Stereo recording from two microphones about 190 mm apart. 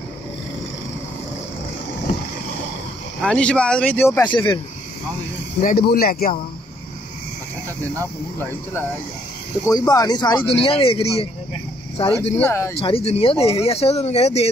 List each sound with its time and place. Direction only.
3.2 s speech: 5° left (ahead or behind)
4.3 s speech: 25° left (ahead or behind)
5.6 s speech: 45° left (ahead or behind)
8.4 s speech: 10° left (ahead or behind); by 12.1 s 30° left (ahead or behind)
12.4 s speech: 10° left (ahead or behind)
12.7 s speech: 30° left (ahead or behind)